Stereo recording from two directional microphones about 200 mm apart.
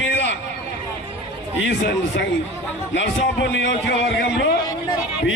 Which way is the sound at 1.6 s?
60° left (ahead or behind).